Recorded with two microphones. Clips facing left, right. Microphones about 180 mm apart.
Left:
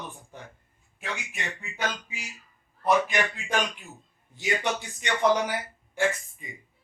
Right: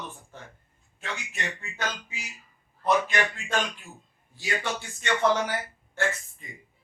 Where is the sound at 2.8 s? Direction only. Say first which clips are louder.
Left 1 dB; 15° left (ahead or behind).